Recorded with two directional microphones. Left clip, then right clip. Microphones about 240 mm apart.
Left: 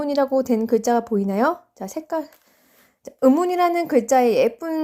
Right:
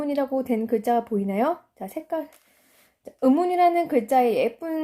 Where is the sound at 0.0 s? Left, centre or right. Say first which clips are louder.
Left 5 dB; left.